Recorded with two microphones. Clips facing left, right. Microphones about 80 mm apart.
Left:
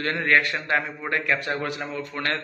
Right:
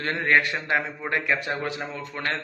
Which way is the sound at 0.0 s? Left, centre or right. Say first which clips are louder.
Even; right.